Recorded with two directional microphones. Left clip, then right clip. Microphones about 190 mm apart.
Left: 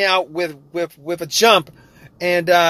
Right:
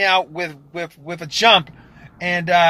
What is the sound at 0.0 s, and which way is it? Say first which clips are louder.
Speech: even; 40° left (ahead or behind).